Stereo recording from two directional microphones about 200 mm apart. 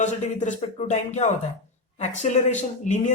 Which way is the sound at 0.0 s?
35° left (ahead or behind).